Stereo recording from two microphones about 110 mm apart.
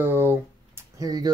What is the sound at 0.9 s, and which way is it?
Speech, 35° right (ahead or behind).